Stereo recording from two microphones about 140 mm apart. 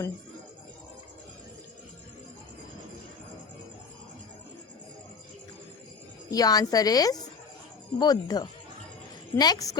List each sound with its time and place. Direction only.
6.3 s a woman's voice: 25° left (ahead or behind)